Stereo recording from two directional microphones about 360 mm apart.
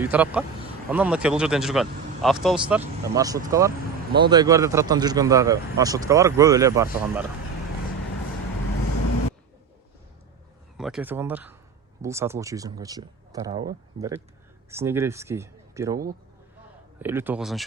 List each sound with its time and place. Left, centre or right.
0.0 s speech: centre
10.8 s speech: centre